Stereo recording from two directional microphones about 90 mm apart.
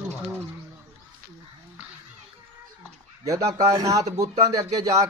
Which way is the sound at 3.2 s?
40° right (ahead or behind).